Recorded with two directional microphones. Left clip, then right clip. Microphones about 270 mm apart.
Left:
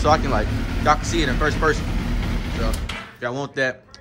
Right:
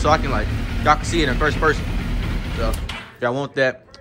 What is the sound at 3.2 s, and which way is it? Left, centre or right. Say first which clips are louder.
Speech: right 4 dB; centre.